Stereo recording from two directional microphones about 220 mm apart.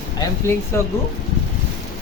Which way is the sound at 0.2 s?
10° left (ahead or behind).